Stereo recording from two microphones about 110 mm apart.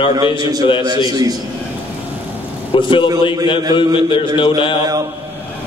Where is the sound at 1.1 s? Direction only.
35° right (ahead or behind).